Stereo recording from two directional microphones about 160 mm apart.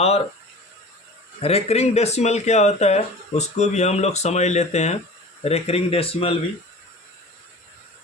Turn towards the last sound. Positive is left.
turn(degrees=35)  # may be behind; listen again after turning